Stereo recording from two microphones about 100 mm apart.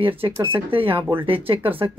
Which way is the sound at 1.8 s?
50° right (ahead or behind).